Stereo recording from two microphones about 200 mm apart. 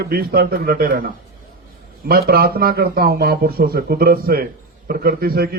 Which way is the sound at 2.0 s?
50° right (ahead or behind).